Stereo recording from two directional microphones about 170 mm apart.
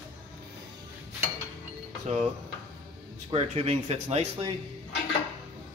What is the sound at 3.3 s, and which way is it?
Speech, 40° right (ahead or behind).